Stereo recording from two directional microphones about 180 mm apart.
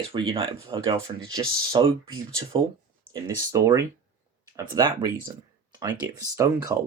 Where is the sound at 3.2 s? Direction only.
15° right (ahead or behind).